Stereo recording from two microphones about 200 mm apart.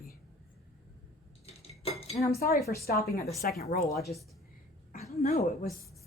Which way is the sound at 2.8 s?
50° left (ahead or behind).